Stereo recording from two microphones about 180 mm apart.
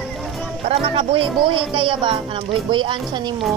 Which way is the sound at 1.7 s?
30° right (ahead or behind).